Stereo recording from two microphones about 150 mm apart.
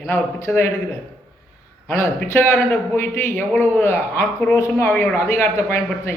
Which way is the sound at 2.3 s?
15° left (ahead or behind).